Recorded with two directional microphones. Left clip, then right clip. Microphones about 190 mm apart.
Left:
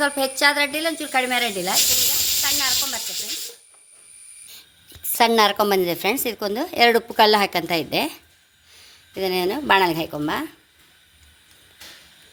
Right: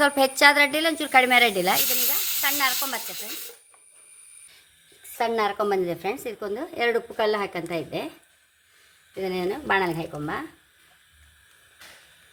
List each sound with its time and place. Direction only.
0.0 s speech: 55° right (ahead or behind)
2.4 s a sound: 55° right (ahead or behind)
5.1 s a woman's voice: 55° left (ahead or behind)